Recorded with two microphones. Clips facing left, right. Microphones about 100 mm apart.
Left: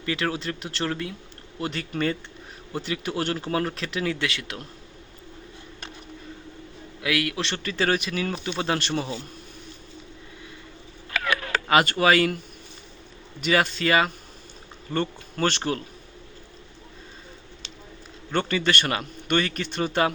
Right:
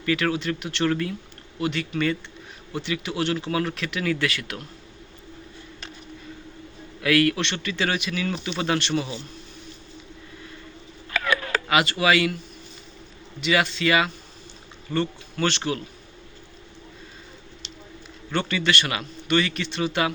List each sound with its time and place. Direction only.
0.0 s speech: 30° left (ahead or behind)
7.0 s a man's voice: 15° left (ahead or behind)
7.3 s speech: 35° left (ahead or behind)
11.7 s speech: 40° left (ahead or behind)
13.4 s speech: 40° left (ahead or behind)
18.3 s a man's voice: 40° left (ahead or behind)